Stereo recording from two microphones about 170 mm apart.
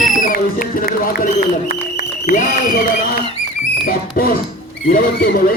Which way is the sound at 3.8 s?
55° left (ahead or behind).